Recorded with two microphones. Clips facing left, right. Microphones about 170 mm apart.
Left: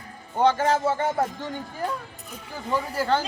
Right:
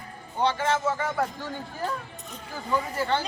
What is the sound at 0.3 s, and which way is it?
Speech, 45° left (ahead or behind).